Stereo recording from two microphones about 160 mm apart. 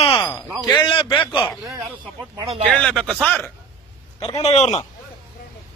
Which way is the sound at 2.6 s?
5° left (ahead or behind).